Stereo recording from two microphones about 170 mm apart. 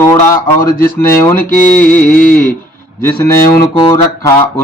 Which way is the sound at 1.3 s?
50° left (ahead or behind).